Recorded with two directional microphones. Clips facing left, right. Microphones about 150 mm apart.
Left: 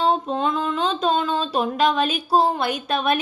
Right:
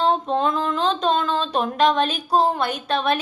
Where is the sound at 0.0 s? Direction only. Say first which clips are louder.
Right 1 dB; 5° left (ahead or behind).